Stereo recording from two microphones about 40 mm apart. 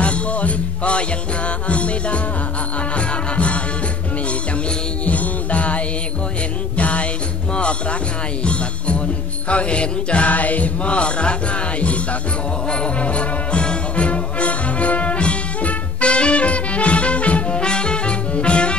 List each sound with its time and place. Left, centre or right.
0.0 s music: left
3.3 s music: left
5.0 s music: left
6.8 s music: left
8.5 s music: left
9.5 s mantra: left
11.8 s music: left